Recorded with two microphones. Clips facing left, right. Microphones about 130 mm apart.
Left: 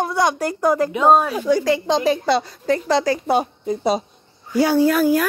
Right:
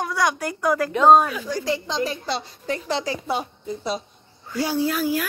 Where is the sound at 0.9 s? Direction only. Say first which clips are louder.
Right 3 dB; 5° left (ahead or behind).